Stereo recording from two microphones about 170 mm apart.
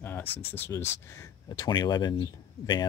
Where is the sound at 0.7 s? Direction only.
15° left (ahead or behind).